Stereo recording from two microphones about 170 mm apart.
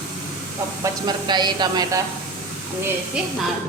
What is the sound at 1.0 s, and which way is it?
Speech, 25° right (ahead or behind).